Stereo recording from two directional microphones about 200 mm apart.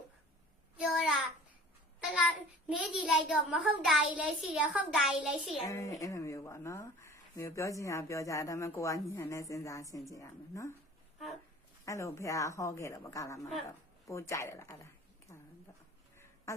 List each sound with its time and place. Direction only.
0.8 s child singing: centre (ahead or behind)
2.0 s a sound: 5° left (ahead or behind)
2.6 s a child's voice: 5° right (ahead or behind)
5.6 s speech: 15° left (ahead or behind)
11.9 s speech: 15° left (ahead or behind)
16.1 s duck: 15° left (ahead or behind)